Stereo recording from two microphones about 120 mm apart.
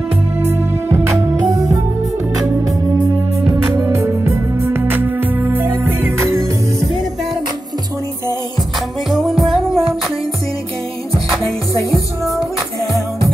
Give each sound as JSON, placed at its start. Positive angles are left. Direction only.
{"t": 0.8, "sound": "music", "side_deg": -20}
{"t": 3.7, "sound": "music", "side_deg": -20}
{"t": 9.1, "sound": "music", "side_deg": 0}